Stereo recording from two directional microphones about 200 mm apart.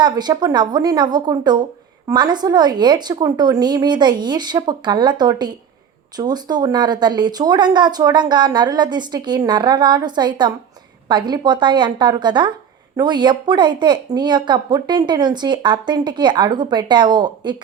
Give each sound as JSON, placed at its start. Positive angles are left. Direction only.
{"t": 0.0, "sound": "speech", "side_deg": -20}